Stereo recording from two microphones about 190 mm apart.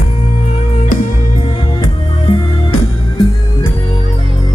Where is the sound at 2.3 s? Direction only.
25° left (ahead or behind).